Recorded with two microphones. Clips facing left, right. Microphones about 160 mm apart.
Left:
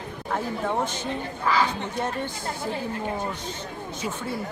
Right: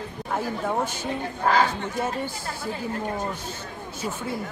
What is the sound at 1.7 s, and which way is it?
Speech, 10° right (ahead or behind).